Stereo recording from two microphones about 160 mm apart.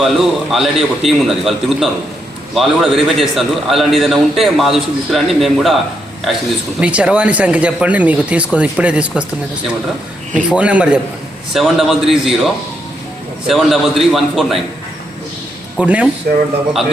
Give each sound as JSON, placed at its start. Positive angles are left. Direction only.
{"t": 0.0, "sound": "a man's voice", "side_deg": 0}
{"t": 10.3, "sound": "a man's voice", "side_deg": -10}
{"t": 13.5, "sound": "a man's voice", "side_deg": 0}
{"t": 15.8, "sound": "speech", "side_deg": -10}
{"t": 16.3, "sound": "speech", "side_deg": -60}